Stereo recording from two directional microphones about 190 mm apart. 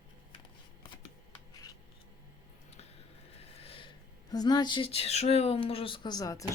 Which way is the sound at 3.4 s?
30° left (ahead or behind).